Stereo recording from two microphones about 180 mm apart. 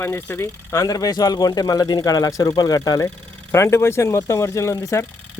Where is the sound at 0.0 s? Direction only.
10° left (ahead or behind).